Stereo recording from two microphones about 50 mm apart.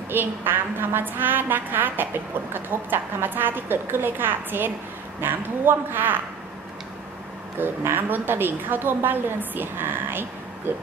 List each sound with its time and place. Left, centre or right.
0.1 s a woman's voice: right
7.6 s a woman's voice: right